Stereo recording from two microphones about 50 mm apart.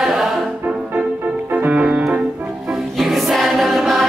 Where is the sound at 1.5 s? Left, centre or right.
Right.